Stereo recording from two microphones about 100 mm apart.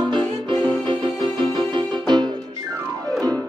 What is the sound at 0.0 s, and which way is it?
Music, 50° right (ahead or behind).